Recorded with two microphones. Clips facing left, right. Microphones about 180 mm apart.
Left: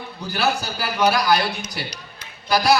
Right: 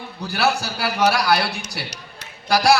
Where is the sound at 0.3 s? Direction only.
75° right (ahead or behind).